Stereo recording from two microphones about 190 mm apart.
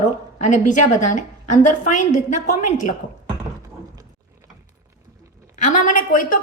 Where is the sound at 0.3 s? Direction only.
40° left (ahead or behind).